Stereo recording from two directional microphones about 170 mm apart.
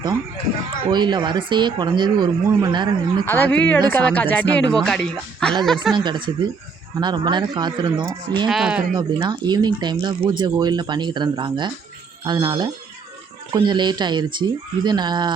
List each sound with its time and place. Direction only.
0.9 s speech: 25° right (ahead or behind)
3.2 s a woman's voice: 10° left (ahead or behind)
6.1 s speech: 25° right (ahead or behind)
8.4 s speech: 5° right (ahead or behind)
9.0 s speech: 25° right (ahead or behind)